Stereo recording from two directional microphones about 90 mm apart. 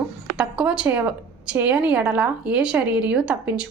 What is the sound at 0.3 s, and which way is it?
A woman's voice, 10° right (ahead or behind).